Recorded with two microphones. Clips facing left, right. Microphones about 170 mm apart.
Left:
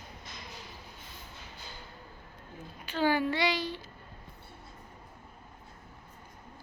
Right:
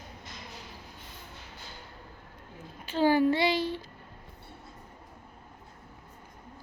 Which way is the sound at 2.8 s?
35° right (ahead or behind).